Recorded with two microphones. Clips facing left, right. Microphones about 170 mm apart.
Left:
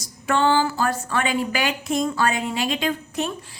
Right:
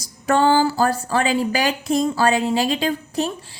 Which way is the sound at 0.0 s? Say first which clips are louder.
Right 3 dB; 40° right (ahead or behind).